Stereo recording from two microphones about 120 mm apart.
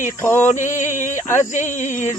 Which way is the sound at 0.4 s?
90° left.